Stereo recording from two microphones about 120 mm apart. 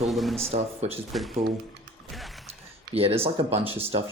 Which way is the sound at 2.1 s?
Centre (ahead or behind).